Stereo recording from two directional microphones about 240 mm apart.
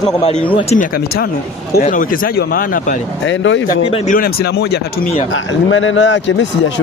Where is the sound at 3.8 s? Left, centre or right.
Left.